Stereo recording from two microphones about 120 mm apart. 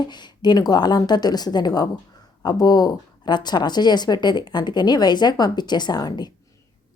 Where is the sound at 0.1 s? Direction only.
35° left (ahead or behind).